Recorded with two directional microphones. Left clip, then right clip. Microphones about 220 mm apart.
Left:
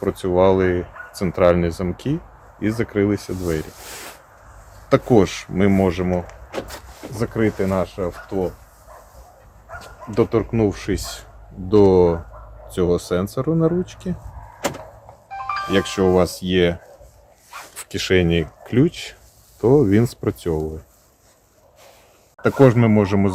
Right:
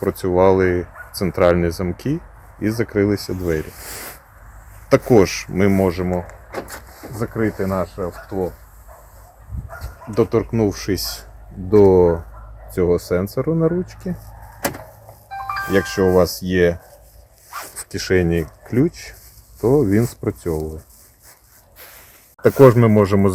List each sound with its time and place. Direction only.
0.0 s speech: 25° right (ahead or behind)
3.8 s speech: 35° right (ahead or behind)
4.9 s speech: 25° right (ahead or behind)
7.2 s speech: 5° left (ahead or behind)
10.2 s speech: 15° right (ahead or behind)
15.7 s speech: 25° right (ahead or behind)
17.7 s speech: centre (ahead or behind)
22.4 s speech: 40° right (ahead or behind)